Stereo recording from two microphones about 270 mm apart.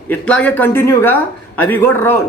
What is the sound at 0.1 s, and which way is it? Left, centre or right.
A man's voice, centre.